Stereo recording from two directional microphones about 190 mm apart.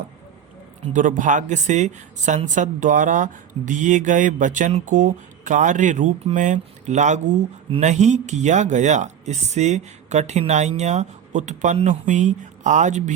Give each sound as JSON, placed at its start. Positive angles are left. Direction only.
{"t": 0.9, "sound": "speech", "side_deg": -40}